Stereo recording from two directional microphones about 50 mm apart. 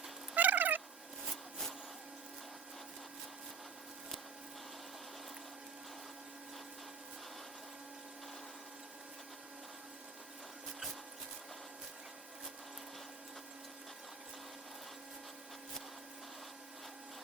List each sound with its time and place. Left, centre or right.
0.3 s fowl: right